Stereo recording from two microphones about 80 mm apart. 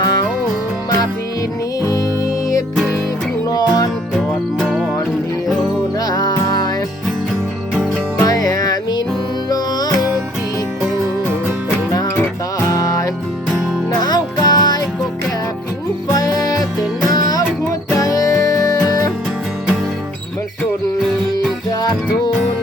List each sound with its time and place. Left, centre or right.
0.0 s music: left
3.5 s music: left
4.1 s music: centre
6.1 s music: left
8.2 s music: left
12.5 s music: left
14.0 s music: left
16.1 s music: left